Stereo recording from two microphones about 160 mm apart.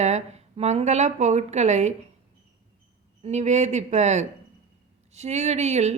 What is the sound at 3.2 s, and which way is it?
A woman's voice, 45° right (ahead or behind).